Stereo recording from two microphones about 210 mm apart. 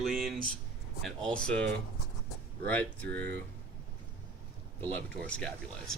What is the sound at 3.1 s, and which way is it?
Speech, 50° right (ahead or behind).